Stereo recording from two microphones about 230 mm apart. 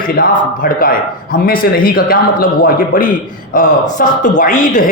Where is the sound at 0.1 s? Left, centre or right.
Left.